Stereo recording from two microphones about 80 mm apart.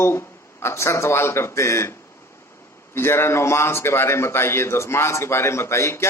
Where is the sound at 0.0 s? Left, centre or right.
Left.